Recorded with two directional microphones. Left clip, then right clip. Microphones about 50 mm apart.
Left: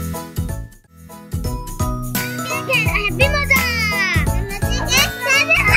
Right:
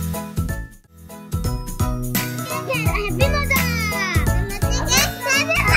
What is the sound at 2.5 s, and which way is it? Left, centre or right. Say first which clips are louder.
Music: left 6 dB; left.